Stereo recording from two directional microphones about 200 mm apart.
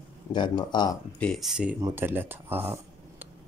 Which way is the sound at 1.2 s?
Centre (ahead or behind).